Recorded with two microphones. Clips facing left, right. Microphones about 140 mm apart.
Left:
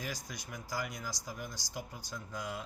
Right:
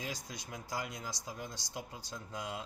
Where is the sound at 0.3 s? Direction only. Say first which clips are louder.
Even; 25° right (ahead or behind).